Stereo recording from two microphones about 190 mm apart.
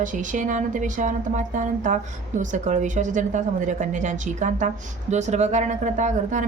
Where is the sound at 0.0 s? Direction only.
45° right (ahead or behind).